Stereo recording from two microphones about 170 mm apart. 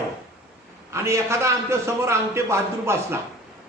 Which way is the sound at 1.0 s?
15° right (ahead or behind).